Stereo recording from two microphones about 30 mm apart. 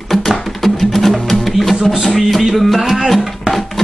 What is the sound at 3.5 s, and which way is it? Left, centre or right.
Music, centre.